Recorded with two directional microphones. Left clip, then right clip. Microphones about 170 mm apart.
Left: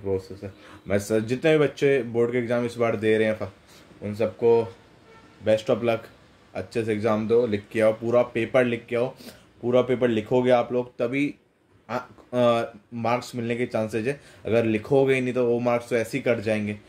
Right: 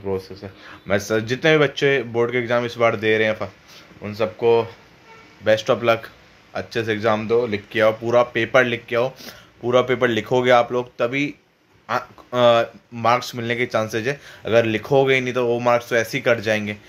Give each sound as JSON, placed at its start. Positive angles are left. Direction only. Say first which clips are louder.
{"t": 0.4, "sound": "speech", "louder": "right 3 dB", "side_deg": 10}
{"t": 5.4, "sound": "speech", "louder": "right 4 dB", "side_deg": 5}